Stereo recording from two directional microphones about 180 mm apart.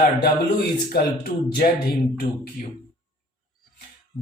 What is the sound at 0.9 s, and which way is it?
Speech, 60° left (ahead or behind).